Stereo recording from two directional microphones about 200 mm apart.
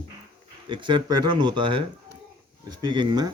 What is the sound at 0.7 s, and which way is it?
Speech, 25° right (ahead or behind).